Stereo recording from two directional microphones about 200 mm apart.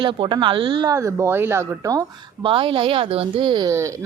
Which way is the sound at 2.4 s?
25° right (ahead or behind).